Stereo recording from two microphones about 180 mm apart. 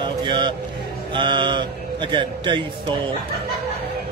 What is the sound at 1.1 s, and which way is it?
A man's voice, 25° right (ahead or behind).